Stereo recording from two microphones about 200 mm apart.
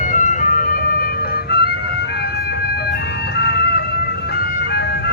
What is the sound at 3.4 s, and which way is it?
Music, 55° left (ahead or behind).